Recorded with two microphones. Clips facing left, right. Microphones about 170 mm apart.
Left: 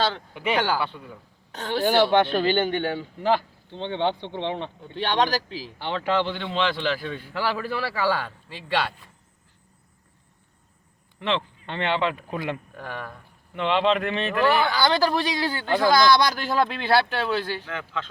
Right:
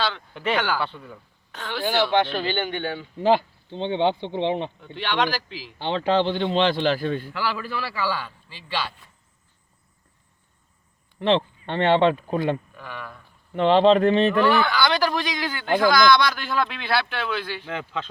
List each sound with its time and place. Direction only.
0.3 s speech: 10° left (ahead or behind)
1.5 s speech: 40° left (ahead or behind)
3.2 s speech: 20° right (ahead or behind)
4.8 s speech: 40° left (ahead or behind)
5.8 s a man's voice: 25° right (ahead or behind)
6.7 s a man's voice: 45° right (ahead or behind)
7.5 s a man's voice: 45° left (ahead or behind)
11.2 s speech: 35° right (ahead or behind)
12.7 s a man's voice: 50° left (ahead or behind)
13.5 s speech: 35° right (ahead or behind)
14.8 s speech: 35° left (ahead or behind)
17.7 s a man's voice: 20° right (ahead or behind)